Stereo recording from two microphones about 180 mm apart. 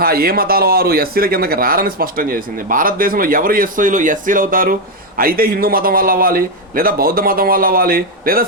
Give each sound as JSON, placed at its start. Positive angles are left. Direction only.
{"t": 0.0, "sound": "speech", "side_deg": -55}